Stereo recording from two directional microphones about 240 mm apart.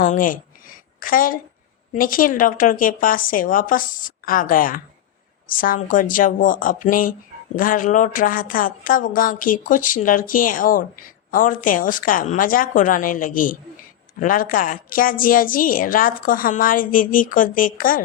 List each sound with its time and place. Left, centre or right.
0.0 s a woman's voice: left